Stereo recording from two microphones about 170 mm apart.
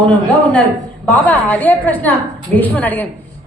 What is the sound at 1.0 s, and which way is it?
A woman's voice, 10° left (ahead or behind).